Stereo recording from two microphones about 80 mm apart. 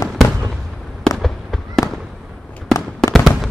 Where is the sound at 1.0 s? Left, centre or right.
Centre.